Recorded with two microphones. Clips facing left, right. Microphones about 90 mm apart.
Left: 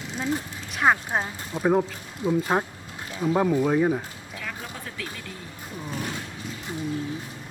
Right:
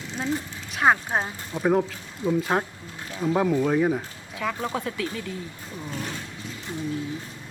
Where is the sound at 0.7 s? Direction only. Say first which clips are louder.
Right 1 dB; 5° right (ahead or behind).